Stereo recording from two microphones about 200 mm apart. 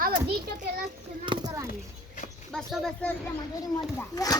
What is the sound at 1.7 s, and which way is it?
Mouse, 40° left (ahead or behind).